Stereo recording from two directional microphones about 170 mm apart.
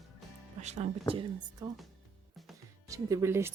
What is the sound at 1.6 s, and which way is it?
Speech, 20° right (ahead or behind).